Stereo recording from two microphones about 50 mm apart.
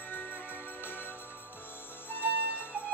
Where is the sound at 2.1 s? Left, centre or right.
Left.